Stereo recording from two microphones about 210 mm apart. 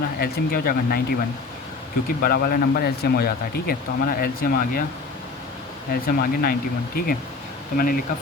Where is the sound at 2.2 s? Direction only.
45° left (ahead or behind).